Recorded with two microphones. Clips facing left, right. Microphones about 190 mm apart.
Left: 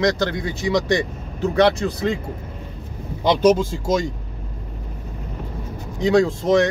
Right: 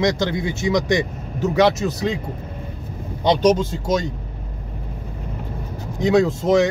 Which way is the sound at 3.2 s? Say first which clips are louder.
Left 1 dB; 5° left (ahead or behind).